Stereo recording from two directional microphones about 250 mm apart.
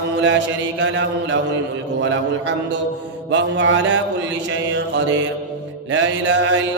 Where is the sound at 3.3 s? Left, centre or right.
Right.